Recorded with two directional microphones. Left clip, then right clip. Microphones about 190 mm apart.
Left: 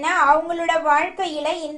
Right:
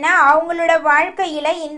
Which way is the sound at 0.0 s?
30° right (ahead or behind).